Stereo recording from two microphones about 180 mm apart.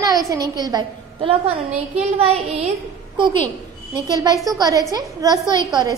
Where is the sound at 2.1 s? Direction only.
35° right (ahead or behind).